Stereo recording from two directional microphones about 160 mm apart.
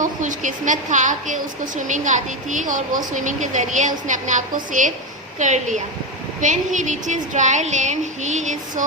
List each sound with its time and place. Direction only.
0.0 s a woman's voice: 55° right (ahead or behind)